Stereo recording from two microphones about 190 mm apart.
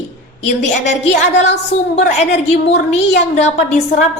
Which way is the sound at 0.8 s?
40° left (ahead or behind).